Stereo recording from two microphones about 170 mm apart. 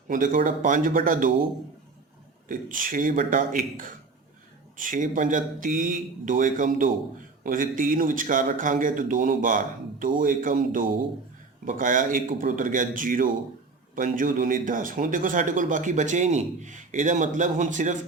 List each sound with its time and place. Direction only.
0.1 s speech: 50° right (ahead or behind)
2.5 s speech: 55° right (ahead or behind)